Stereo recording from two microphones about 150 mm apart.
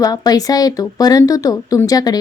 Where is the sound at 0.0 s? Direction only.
25° left (ahead or behind).